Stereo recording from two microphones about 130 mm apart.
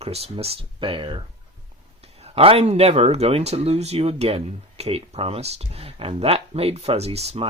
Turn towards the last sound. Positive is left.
turn(degrees=-55)  # may be behind; listen again after turning